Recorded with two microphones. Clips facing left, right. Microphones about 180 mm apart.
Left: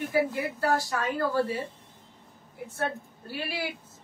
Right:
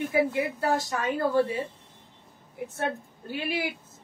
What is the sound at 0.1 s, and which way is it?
A woman's voice, 20° right (ahead or behind).